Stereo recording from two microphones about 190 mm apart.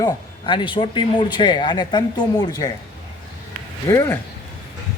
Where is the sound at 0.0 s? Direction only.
25° left (ahead or behind).